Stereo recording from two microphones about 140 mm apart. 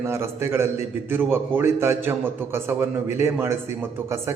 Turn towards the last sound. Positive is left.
turn(degrees=-15)  # may be behind; listen again after turning